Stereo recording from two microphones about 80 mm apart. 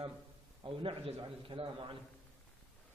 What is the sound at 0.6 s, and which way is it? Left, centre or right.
A man's voice, right.